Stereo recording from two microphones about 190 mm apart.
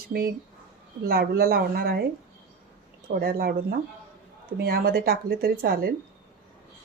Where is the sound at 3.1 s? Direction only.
50° right (ahead or behind).